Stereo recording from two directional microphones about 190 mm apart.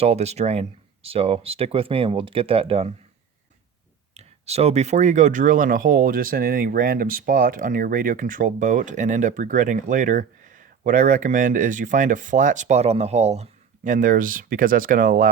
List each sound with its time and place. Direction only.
0.0 s speech: 35° right (ahead or behind)
4.1 s speech: 35° right (ahead or behind)